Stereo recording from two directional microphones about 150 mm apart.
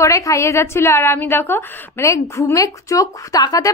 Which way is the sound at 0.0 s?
20° left (ahead or behind).